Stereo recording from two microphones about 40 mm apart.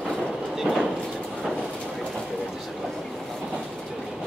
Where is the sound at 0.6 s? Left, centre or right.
Centre.